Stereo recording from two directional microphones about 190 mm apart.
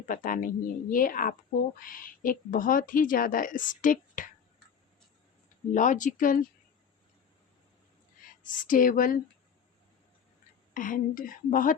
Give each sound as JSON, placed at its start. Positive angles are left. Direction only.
{"t": 0.0, "sound": "speech", "side_deg": 45}
{"t": 5.7, "sound": "speech", "side_deg": 40}
{"t": 8.4, "sound": "speech", "side_deg": 45}
{"t": 10.8, "sound": "speech", "side_deg": 45}